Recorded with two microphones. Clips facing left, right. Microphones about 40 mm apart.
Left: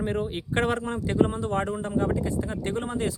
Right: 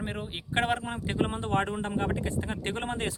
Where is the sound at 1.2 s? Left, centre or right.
Right.